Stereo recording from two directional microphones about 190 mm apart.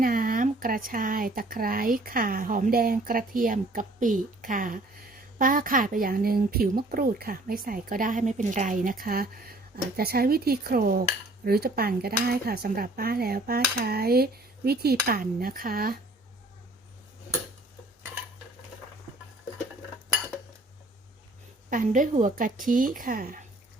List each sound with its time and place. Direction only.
0.0 s speech: 50° right (ahead or behind)
21.7 s speech: 45° right (ahead or behind)